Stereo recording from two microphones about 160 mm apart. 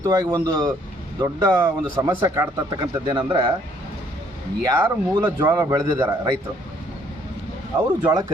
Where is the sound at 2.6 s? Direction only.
25° right (ahead or behind).